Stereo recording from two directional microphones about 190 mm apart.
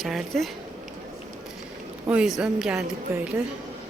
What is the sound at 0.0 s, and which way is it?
Speech, centre (ahead or behind).